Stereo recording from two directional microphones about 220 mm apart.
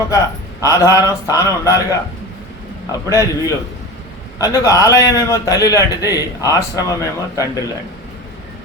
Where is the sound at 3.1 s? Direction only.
15° left (ahead or behind).